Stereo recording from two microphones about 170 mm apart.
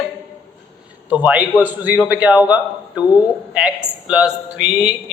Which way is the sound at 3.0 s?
20° left (ahead or behind).